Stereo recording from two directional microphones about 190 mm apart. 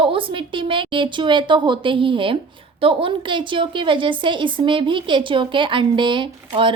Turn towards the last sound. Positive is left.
turn(degrees=-25)  # may be behind; listen again after turning